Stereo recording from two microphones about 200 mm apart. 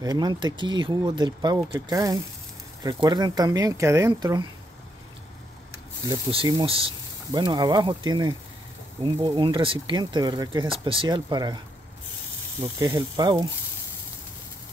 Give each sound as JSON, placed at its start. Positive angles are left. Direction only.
{"t": 0.0, "sound": "speech", "side_deg": -20}
{"t": 6.0, "sound": "speech", "side_deg": -25}
{"t": 12.6, "sound": "speech", "side_deg": -25}